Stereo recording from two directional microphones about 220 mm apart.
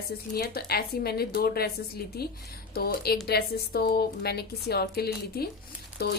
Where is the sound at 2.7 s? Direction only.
45° left (ahead or behind).